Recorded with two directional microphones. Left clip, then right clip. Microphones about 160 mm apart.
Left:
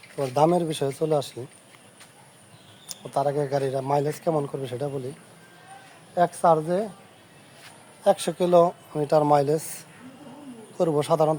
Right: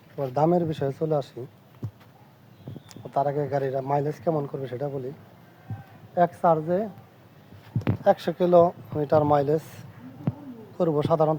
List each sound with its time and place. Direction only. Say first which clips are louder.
0.2 s a man's voice: left 2 dB; 25° left (ahead or behind)
3.1 s a man's voice: left 1 dB; 15° left (ahead or behind)
6.1 s a man's voice: left 1 dB; 15° left (ahead or behind)
8.0 s a man's voice: even; 20° left (ahead or behind)